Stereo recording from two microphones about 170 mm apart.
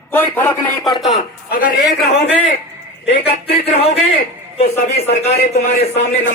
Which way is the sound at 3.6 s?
35° left (ahead or behind).